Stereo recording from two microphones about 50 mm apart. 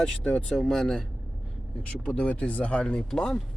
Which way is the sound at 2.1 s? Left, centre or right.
Left.